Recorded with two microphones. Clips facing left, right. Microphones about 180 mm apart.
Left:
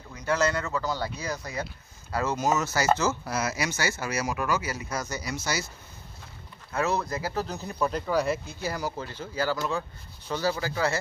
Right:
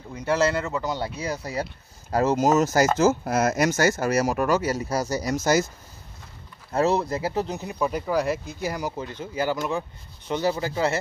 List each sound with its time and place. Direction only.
0.1 s speech: 25° right (ahead or behind); by 5.7 s 45° right (ahead or behind)
6.7 s speech: 30° right (ahead or behind)